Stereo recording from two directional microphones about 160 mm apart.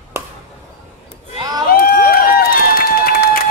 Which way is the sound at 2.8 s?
70° left (ahead or behind).